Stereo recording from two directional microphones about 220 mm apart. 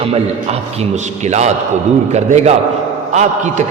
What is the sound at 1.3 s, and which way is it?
A man's voice, 30° right (ahead or behind).